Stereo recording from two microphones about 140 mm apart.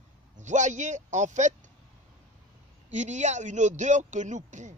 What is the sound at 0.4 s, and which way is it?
A man's voice, 60° right (ahead or behind).